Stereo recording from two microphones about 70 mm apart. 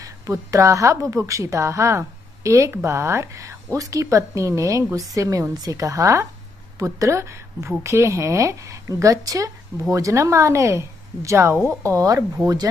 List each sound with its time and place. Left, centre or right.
0.0 s a woman's voice: right
11.8 s speech: right